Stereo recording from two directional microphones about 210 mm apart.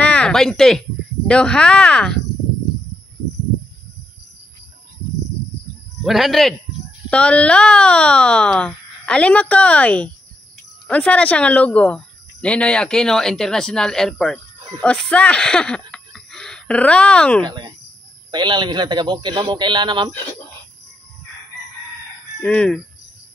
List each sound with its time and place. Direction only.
0.0 s speech: 5° left (ahead or behind)
6.0 s speech: centre (ahead or behind)
17.5 s a man's voice: 20° right (ahead or behind)
22.4 s speech: 5° left (ahead or behind)